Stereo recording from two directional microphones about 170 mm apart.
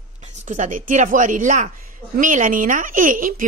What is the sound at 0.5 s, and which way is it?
A woman's voice, 50° right (ahead or behind).